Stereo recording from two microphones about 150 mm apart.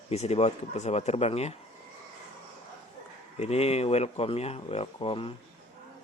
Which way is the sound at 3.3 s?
45° left (ahead or behind).